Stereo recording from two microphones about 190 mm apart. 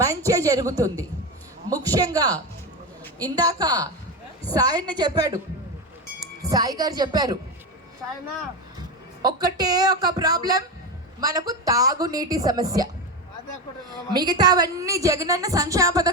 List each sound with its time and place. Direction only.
0.3 s a woman's voice: 20° right (ahead or behind)
9.2 s a woman's voice: 20° right (ahead or behind)
14.1 s a woman's voice: 20° right (ahead or behind)